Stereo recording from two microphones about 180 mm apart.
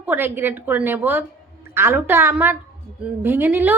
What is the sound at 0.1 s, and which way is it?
A woman's voice, 10° right (ahead or behind).